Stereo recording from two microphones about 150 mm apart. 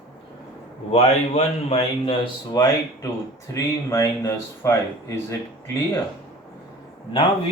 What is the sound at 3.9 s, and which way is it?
Speech, 20° left (ahead or behind).